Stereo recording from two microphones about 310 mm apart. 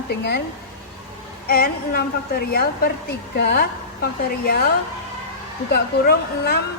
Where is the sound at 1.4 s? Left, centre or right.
Left.